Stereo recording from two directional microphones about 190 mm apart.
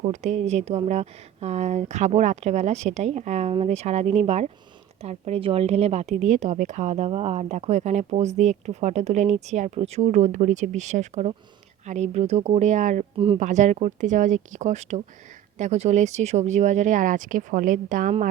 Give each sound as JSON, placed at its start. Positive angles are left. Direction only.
{"t": 0.0, "sound": "a woman's voice", "side_deg": -40}
{"t": 13.1, "sound": "speech", "side_deg": -30}
{"t": 13.4, "sound": "a woman's voice", "side_deg": -40}